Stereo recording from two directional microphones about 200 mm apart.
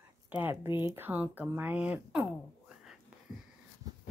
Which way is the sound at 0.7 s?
25° left (ahead or behind).